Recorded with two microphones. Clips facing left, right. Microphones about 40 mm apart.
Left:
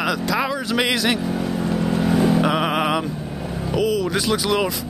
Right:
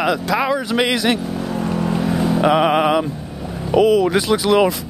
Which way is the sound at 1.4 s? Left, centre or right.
Centre.